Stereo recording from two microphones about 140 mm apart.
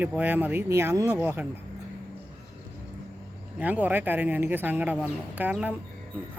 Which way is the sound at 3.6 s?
10° right (ahead or behind).